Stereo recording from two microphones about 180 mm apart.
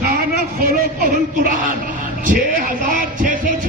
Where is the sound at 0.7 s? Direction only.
45° right (ahead or behind).